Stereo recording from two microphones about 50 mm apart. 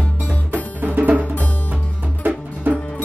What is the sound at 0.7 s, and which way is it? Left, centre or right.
Music, right.